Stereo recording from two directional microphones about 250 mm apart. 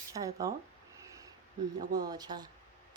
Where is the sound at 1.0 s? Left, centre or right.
Centre.